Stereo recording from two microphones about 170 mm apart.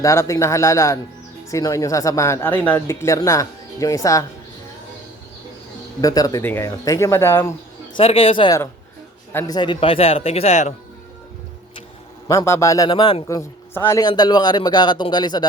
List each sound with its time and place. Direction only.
0.0 s a man's voice: 15° left (ahead or behind)
6.0 s speech: 20° left (ahead or behind)
7.9 s speech: 30° left (ahead or behind)
9.3 s speech: 20° left (ahead or behind); by 10.8 s 40° left (ahead or behind)
12.3 s a man's voice: 20° left (ahead or behind)